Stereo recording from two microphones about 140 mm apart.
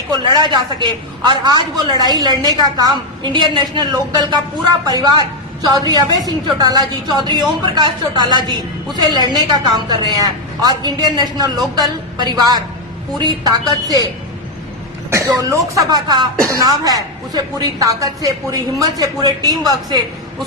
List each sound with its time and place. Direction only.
0.1 s a woman's voice: 30° right (ahead or behind)
15.1 s a woman's voice: 20° right (ahead or behind)